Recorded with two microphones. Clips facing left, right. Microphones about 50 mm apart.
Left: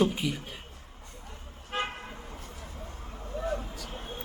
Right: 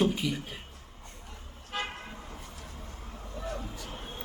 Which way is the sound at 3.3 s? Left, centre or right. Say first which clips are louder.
Left 6 dB; centre.